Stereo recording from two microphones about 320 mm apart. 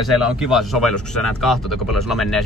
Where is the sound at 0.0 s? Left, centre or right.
Centre.